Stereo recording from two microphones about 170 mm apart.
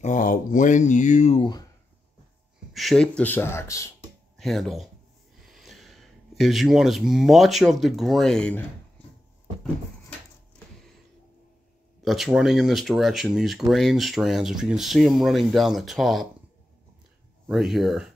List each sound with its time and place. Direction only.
0.0 s speech: 50° left (ahead or behind)
2.7 s speech: centre (ahead or behind); by 3.9 s 15° left (ahead or behind)
4.4 s speech: centre (ahead or behind)
12.0 s speech: centre (ahead or behind)
17.5 s speech: centre (ahead or behind)